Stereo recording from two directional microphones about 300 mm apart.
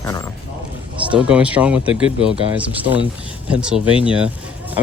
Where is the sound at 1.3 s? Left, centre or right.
Centre.